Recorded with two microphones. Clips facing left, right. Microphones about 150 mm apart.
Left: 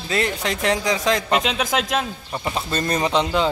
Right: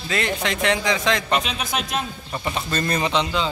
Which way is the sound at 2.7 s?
15° left (ahead or behind).